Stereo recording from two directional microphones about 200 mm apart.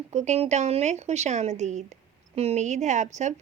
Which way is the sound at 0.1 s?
35° right (ahead or behind).